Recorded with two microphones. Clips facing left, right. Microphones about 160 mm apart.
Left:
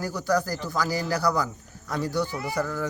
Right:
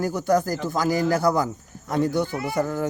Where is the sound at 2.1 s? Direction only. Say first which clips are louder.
Right 3 dB; 50° right (ahead or behind).